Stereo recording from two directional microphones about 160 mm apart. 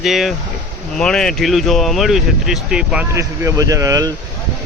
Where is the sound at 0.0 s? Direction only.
Centre (ahead or behind).